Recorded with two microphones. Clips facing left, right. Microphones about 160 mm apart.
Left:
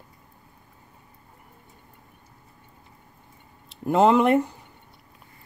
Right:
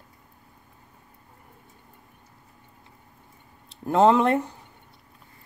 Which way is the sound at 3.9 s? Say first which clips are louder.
Left 1 dB; 5° left (ahead or behind).